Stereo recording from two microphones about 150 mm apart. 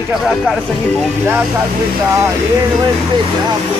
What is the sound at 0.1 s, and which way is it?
Speech, centre (ahead or behind).